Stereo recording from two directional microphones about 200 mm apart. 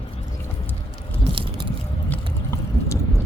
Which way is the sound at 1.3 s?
25° right (ahead or behind).